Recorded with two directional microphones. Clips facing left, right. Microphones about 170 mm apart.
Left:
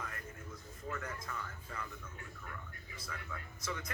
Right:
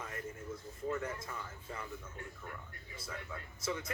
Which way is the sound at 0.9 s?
25° right (ahead or behind).